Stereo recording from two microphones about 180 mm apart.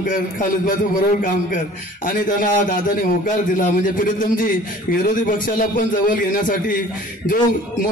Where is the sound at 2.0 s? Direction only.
50° left (ahead or behind).